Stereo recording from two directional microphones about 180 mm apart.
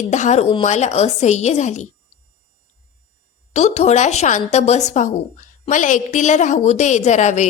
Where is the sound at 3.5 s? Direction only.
40° left (ahead or behind).